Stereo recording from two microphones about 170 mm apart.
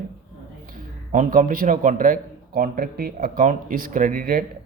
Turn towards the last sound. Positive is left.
turn(degrees=-55)  # may be behind; listen again after turning